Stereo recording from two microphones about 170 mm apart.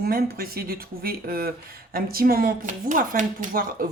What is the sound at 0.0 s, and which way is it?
Speech, 65° right (ahead or behind).